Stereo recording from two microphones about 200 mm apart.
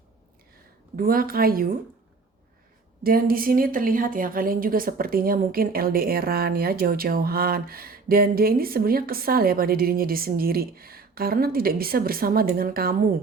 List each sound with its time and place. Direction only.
0.9 s a woman's voice: 45° right (ahead or behind)
3.0 s a woman's voice: 45° right (ahead or behind)